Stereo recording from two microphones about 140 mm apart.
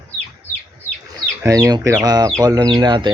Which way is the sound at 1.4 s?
20° right (ahead or behind).